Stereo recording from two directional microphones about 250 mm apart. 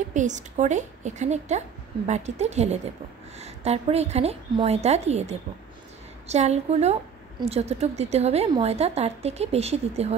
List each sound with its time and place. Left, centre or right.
0.1 s a woman's voice: right